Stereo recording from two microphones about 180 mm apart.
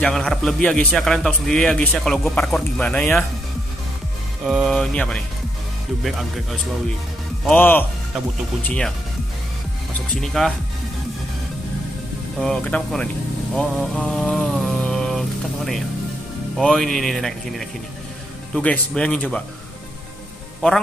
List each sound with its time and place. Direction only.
0.0 s a man's voice: 5° left (ahead or behind)
4.5 s a man's voice: centre (ahead or behind)
10.2 s a man's voice: centre (ahead or behind)
12.4 s a man's voice: 5° left (ahead or behind)
13.6 s mantra: 5° left (ahead or behind)
16.5 s a man's voice: 5° left (ahead or behind)